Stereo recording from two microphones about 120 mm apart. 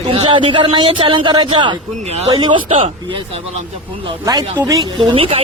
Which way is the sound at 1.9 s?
65° right (ahead or behind).